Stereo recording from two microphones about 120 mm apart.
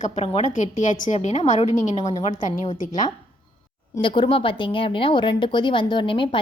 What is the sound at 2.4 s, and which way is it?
Speech, 90° left.